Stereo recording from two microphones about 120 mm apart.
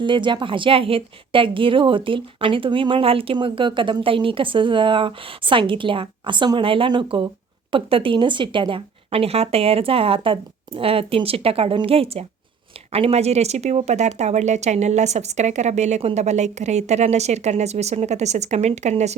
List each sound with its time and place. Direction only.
0.0 s a woman's voice: 40° right (ahead or behind); by 19.1 s 70° right (ahead or behind)